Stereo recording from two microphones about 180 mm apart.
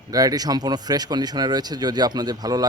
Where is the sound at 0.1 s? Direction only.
20° right (ahead or behind).